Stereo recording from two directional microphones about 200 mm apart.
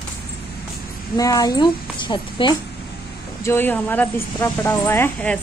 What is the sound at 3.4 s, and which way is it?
Speech, 10° left (ahead or behind).